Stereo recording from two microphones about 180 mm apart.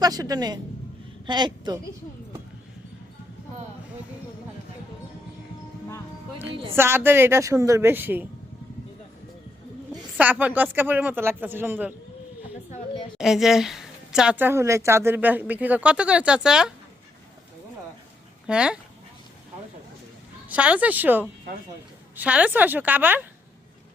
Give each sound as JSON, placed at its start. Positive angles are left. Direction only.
{"t": 0.0, "sound": "speech", "side_deg": -20}
{"t": 6.5, "sound": "speech", "side_deg": -30}
{"t": 6.7, "sound": "a woman's voice", "side_deg": -15}
{"t": 10.2, "sound": "a woman's voice", "side_deg": -10}
{"t": 13.1, "sound": "a woman's voice", "side_deg": 0}
{"t": 18.4, "sound": "speech", "side_deg": -5}
{"t": 20.5, "sound": "a woman's voice", "side_deg": -10}